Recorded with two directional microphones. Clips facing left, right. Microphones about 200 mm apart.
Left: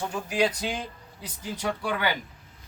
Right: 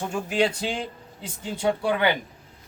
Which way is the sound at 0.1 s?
25° right (ahead or behind).